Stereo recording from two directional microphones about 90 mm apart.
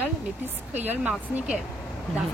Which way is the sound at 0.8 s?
15° right (ahead or behind).